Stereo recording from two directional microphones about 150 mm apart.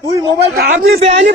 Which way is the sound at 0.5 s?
85° right.